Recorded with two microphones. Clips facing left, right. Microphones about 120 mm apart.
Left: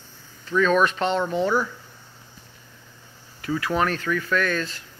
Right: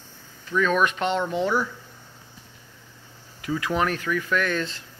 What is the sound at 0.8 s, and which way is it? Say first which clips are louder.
Speech: left 1 dB; 15° right (ahead or behind).